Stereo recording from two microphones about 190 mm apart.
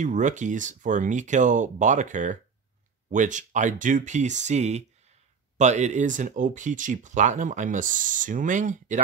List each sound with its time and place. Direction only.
0.0 s speech: 40° right (ahead or behind)